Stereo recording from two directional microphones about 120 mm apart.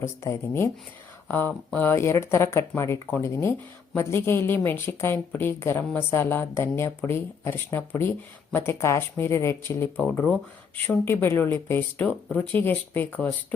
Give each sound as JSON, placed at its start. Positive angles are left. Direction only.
{"t": 0.0, "sound": "a woman's voice", "side_deg": 25}